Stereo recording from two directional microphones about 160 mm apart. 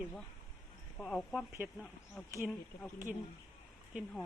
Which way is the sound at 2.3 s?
15° right (ahead or behind).